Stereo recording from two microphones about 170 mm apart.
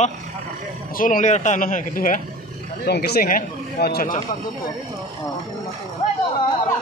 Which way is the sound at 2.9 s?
65° left (ahead or behind).